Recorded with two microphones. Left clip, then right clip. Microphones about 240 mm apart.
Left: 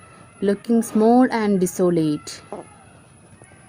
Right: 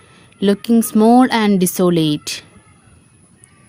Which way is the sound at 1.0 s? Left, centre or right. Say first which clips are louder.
Right 4 dB; right.